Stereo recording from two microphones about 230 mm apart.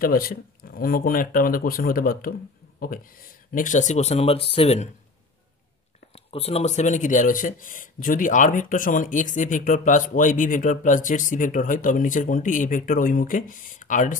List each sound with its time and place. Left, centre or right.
0.0 s speech: left
6.1 s speech: left